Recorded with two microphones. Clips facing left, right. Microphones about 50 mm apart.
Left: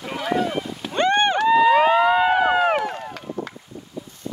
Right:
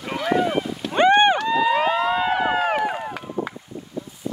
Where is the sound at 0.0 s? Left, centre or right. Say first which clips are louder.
Right 2 dB; centre.